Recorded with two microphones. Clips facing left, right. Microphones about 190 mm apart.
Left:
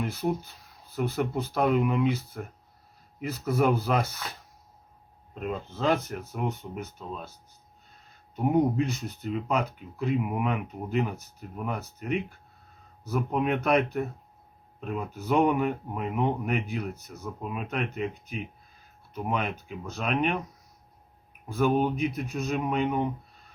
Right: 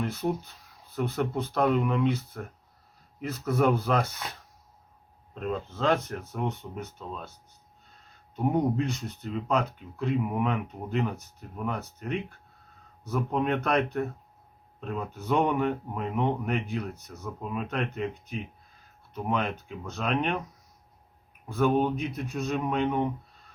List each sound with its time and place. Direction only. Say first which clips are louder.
0.0 s speech: even; 5° left (ahead or behind)
5.3 s speech: right 1 dB; 5° left (ahead or behind)
8.4 s speech: left 2 dB; 5° left (ahead or behind)
21.4 s speech: even; 5° left (ahead or behind)